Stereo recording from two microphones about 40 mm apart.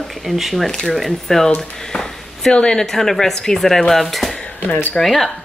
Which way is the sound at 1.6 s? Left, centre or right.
Centre.